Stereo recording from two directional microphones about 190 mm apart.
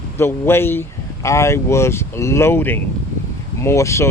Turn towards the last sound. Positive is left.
turn(degrees=15)  # may be behind; listen again after turning